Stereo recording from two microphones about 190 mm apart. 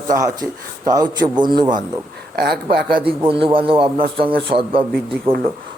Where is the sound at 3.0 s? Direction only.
25° right (ahead or behind).